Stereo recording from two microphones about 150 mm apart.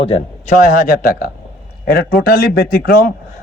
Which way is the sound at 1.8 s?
90° left.